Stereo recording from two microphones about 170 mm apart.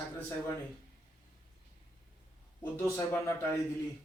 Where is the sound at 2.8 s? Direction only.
15° left (ahead or behind).